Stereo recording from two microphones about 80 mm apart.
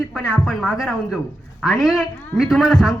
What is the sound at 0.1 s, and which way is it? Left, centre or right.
A man's voice, centre.